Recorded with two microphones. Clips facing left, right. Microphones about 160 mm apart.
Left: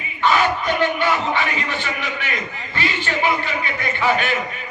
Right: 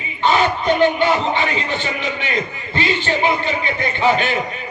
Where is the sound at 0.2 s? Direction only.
25° right (ahead or behind).